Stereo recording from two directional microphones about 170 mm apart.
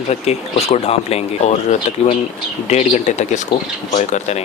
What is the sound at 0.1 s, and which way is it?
Speech, 40° left (ahead or behind).